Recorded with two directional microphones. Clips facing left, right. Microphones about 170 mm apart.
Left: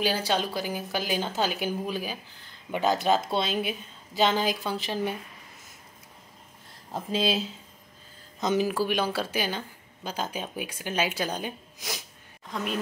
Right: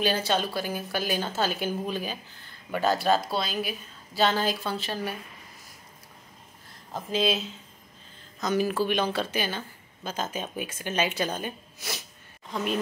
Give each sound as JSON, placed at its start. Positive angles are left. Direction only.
{"t": 0.0, "sound": "speech", "side_deg": 10}
{"t": 6.9, "sound": "speech", "side_deg": 30}
{"t": 8.6, "sound": "speech", "side_deg": 10}
{"t": 12.4, "sound": "a woman's voice", "side_deg": 0}